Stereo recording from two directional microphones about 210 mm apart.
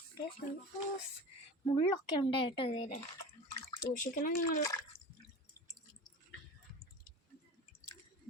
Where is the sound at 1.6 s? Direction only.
25° left (ahead or behind).